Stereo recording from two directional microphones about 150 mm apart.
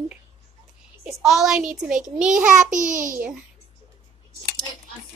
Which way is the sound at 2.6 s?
60° right (ahead or behind).